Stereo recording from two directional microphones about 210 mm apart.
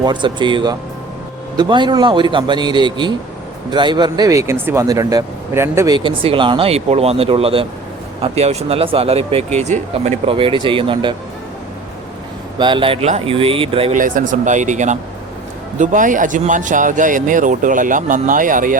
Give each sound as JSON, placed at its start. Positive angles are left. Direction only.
{"t": 0.0, "sound": "speech", "side_deg": -20}
{"t": 12.5, "sound": "speech", "side_deg": -20}
{"t": 14.0, "sound": "speech", "side_deg": -40}